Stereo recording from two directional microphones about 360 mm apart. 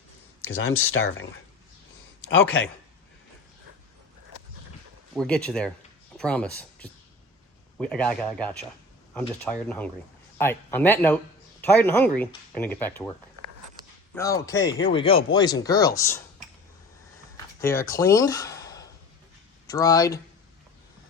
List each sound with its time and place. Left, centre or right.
0.8 s speech: left
2.3 s speech: left
5.1 s speech: centre
14.2 s speech: centre
17.3 s speech: centre